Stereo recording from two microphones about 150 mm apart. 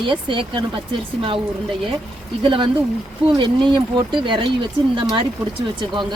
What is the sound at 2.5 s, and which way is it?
Speech, 35° right (ahead or behind).